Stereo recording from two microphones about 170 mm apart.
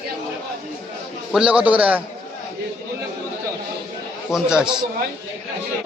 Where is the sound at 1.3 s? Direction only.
5° right (ahead or behind).